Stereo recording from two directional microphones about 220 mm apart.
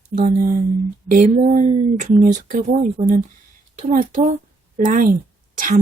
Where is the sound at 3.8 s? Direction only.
30° right (ahead or behind).